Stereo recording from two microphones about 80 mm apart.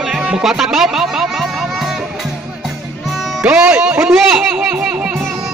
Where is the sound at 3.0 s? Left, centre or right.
Centre.